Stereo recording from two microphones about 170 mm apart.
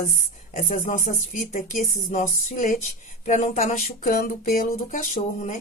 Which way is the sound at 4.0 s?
55° left (ahead or behind).